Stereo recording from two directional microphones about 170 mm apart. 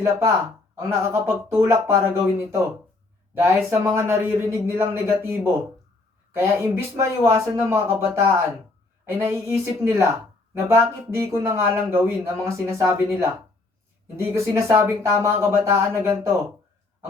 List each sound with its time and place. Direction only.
0.0 s speech: 15° right (ahead or behind)
14.2 s speech: 15° right (ahead or behind)